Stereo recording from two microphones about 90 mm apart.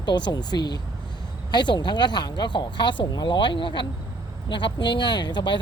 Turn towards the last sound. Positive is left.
turn(degrees=60)  # may be behind; listen again after turning